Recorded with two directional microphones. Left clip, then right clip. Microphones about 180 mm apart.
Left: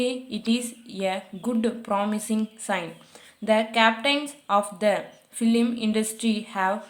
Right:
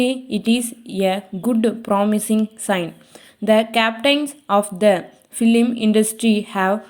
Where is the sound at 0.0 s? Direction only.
30° right (ahead or behind).